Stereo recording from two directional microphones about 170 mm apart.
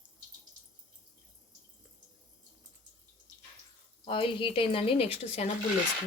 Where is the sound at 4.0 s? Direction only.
30° left (ahead or behind).